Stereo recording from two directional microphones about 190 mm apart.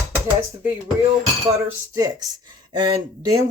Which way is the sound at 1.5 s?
15° right (ahead or behind).